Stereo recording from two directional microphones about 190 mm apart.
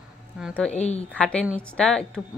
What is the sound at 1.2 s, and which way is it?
A woman's voice, 5° left (ahead or behind).